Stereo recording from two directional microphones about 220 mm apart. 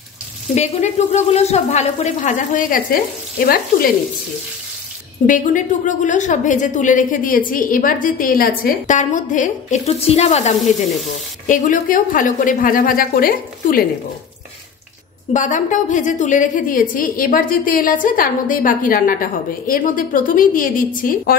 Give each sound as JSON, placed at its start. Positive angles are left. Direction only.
{"t": 0.6, "sound": "a woman's voice", "side_deg": 30}
{"t": 5.2, "sound": "a woman's voice", "side_deg": 35}
{"t": 15.3, "sound": "a woman's voice", "side_deg": 35}